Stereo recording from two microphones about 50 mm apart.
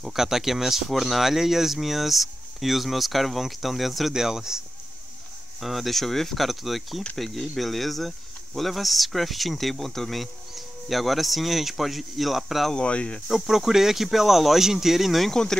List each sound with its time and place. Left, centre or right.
0.0 s speech: centre
5.6 s speech: centre
12.7 s speech: left
13.3 s speech: centre